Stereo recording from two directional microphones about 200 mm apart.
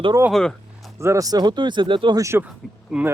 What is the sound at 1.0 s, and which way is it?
Speech, 15° right (ahead or behind).